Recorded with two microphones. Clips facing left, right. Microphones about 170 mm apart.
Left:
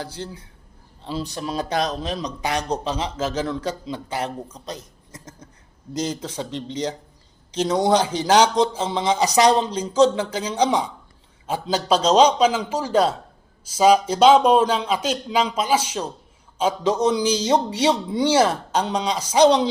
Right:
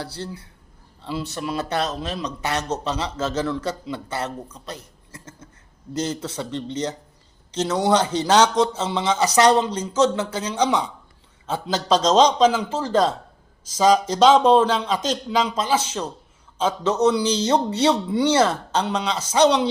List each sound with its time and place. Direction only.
1.5 s a man's voice: 15° left (ahead or behind)